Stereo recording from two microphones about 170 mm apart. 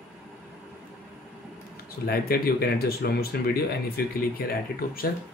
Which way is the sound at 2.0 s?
65° left (ahead or behind).